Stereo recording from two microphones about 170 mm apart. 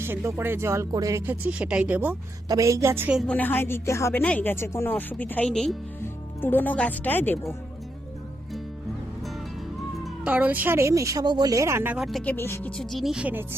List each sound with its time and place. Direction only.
0.0 s speech: 15° right (ahead or behind)
3.2 s speech: 5° left (ahead or behind)
10.2 s speech: 10° right (ahead or behind)